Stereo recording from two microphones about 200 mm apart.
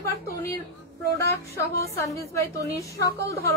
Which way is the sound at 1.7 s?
15° left (ahead or behind).